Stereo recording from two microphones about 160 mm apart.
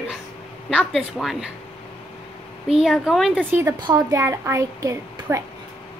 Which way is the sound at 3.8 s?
25° right (ahead or behind).